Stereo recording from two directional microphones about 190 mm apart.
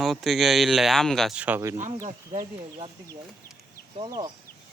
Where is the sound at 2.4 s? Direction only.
25° right (ahead or behind).